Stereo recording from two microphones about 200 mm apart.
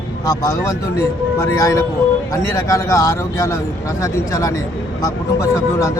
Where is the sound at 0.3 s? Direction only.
15° left (ahead or behind).